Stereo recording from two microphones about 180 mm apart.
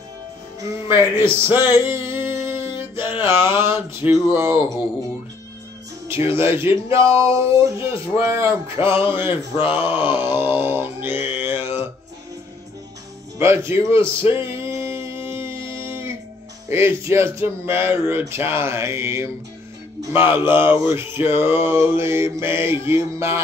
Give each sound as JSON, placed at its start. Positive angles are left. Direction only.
{"t": 0.8, "sound": "speech", "side_deg": -15}
{"t": 2.4, "sound": "music", "side_deg": -15}
{"t": 3.1, "sound": "speech", "side_deg": -15}
{"t": 6.0, "sound": "speech", "side_deg": -15}
{"t": 8.7, "sound": "music", "side_deg": 30}
{"t": 9.8, "sound": "mantra", "side_deg": -10}
{"t": 13.4, "sound": "speech", "side_deg": -15}
{"t": 14.3, "sound": "music", "side_deg": -15}
{"t": 15.5, "sound": "music", "side_deg": 30}
{"t": 15.8, "sound": "music", "side_deg": -15}
{"t": 16.6, "sound": "speech", "side_deg": -15}